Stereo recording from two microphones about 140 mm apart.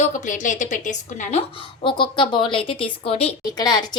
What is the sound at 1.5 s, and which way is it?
A woman's voice, 40° left (ahead or behind).